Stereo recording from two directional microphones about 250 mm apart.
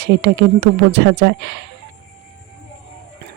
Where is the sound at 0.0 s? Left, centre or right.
Right.